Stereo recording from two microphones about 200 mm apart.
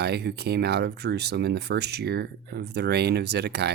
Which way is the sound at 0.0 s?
55° right (ahead or behind).